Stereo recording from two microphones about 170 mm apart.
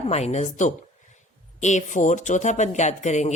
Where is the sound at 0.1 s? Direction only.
40° left (ahead or behind).